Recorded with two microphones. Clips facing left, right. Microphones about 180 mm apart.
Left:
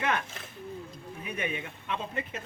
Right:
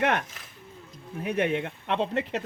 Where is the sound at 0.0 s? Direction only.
70° right (ahead or behind).